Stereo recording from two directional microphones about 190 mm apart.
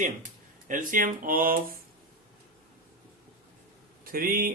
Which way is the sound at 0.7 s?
45° right (ahead or behind).